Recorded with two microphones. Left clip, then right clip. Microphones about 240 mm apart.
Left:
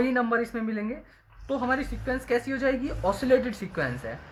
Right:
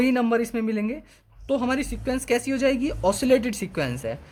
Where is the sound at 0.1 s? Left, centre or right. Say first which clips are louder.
Right 3 dB; right.